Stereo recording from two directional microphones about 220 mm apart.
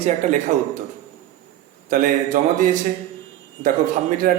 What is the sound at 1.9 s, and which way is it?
Speech, 35° right (ahead or behind).